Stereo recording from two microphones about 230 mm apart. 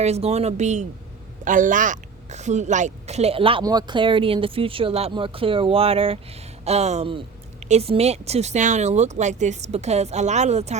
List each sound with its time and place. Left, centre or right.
0.0 s a woman's voice: right